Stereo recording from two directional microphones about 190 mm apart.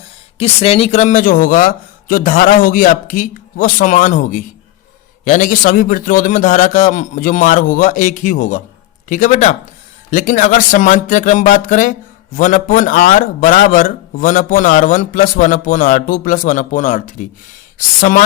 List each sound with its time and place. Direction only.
0.3 s a man's voice: 30° left (ahead or behind)